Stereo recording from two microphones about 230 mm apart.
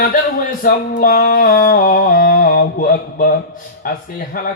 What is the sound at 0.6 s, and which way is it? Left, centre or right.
Speech, left.